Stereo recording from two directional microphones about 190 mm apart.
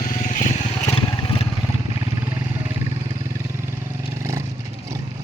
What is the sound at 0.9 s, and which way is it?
Vehicle, 25° left (ahead or behind).